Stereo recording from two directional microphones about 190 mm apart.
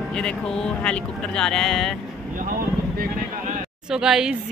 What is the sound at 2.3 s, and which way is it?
Vehicle, 45° right (ahead or behind).